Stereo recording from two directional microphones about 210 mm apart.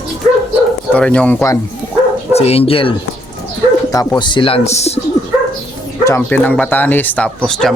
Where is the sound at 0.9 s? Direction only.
5° left (ahead or behind).